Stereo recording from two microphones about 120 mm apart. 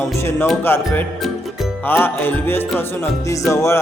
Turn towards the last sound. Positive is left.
turn(degrees=25)  # may be behind; listen again after turning